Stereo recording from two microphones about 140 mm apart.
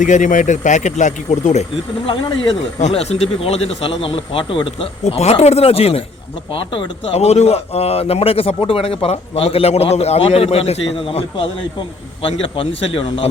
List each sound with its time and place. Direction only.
0.0 s speech: 65° left (ahead or behind)
2.0 s a man's voice: 35° left (ahead or behind)
2.8 s a man's voice: 50° left (ahead or behind)
5.0 s a man's voice: 50° left (ahead or behind)